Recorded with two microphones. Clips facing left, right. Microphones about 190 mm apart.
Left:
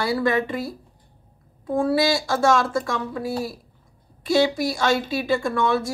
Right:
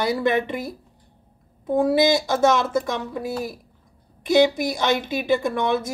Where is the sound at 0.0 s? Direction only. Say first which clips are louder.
Right 1 dB; 20° right (ahead or behind).